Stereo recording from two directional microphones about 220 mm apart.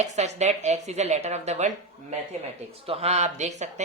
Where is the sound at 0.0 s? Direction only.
30° right (ahead or behind).